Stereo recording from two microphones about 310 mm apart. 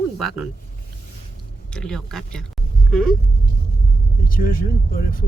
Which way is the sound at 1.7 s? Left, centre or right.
Centre.